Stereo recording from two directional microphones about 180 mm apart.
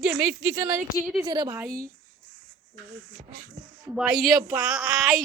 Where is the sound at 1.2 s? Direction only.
20° right (ahead or behind).